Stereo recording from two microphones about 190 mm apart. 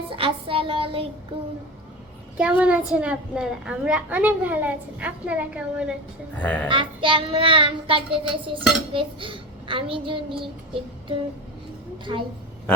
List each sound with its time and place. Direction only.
0.1 s child singing: 25° right (ahead or behind)
2.4 s a child's voice: 5° right (ahead or behind)
6.3 s a woman's voice: 5° left (ahead or behind)
6.7 s a woman's voice: 25° right (ahead or behind)